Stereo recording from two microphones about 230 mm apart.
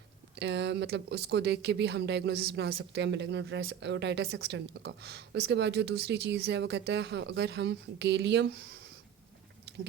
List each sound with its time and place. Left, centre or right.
0.3 s speech: right